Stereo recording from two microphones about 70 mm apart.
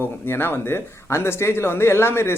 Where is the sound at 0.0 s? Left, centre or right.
Left.